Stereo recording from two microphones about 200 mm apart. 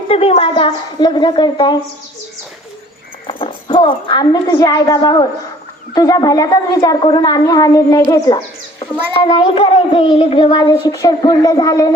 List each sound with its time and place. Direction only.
0.1 s a child's voice: 30° left (ahead or behind)
3.2 s a child's voice: 25° left (ahead or behind)